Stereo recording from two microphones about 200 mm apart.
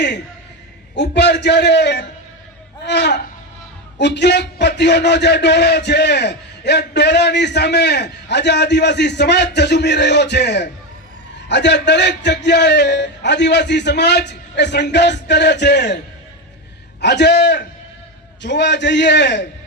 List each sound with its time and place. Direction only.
0.9 s a man's voice: 60° left (ahead or behind)
17.0 s a man's voice: 60° left (ahead or behind)